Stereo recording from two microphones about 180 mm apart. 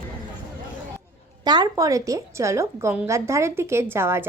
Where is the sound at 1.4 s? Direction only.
20° right (ahead or behind).